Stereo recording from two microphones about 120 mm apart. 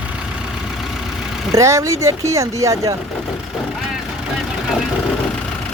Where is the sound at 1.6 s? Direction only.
25° right (ahead or behind).